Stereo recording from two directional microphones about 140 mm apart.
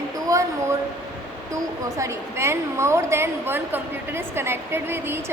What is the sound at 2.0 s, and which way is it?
A woman's voice, 20° right (ahead or behind).